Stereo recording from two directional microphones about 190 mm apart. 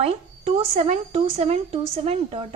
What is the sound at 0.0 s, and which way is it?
A woman's voice, 35° right (ahead or behind).